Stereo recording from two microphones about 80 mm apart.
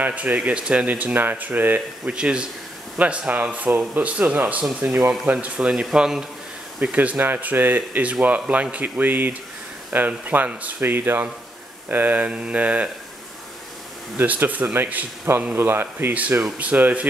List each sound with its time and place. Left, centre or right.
0.0 s speech: centre
14.1 s speech: right